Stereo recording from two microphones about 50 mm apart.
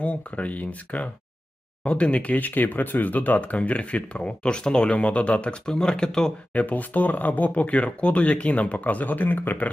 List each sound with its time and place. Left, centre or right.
0.0 s speech: left
6.5 s speech: left